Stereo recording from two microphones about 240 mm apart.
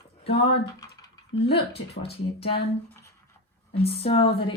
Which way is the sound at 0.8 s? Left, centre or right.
Centre.